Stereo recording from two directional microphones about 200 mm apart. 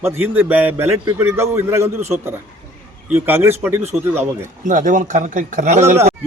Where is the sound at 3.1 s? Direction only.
10° right (ahead or behind).